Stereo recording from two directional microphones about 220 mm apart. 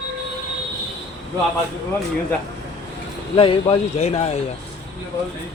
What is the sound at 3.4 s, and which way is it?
Speech, 25° left (ahead or behind).